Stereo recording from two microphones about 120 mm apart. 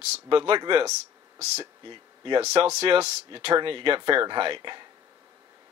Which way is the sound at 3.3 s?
45° right (ahead or behind).